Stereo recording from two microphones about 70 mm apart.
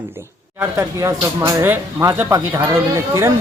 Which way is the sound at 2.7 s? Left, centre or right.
Right.